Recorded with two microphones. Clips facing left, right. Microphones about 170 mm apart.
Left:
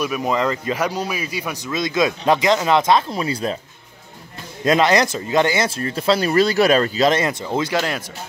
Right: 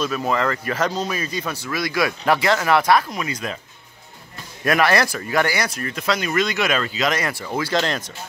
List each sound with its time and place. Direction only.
0.0 s speech: 15° left (ahead or behind); by 3.5 s 30° left (ahead or behind)
4.6 s speech: 20° left (ahead or behind)
7.7 s speech: 10° left (ahead or behind)